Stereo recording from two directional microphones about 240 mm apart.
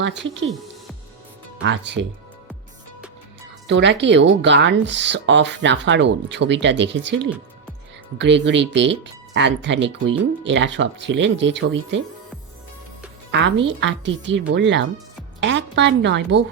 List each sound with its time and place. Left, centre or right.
0.0 s speech: right
1.6 s speech: right
3.7 s speech: right
13.3 s a woman's voice: right